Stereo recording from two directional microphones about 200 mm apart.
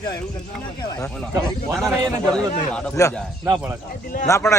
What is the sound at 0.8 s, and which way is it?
Speech, 15° left (ahead or behind).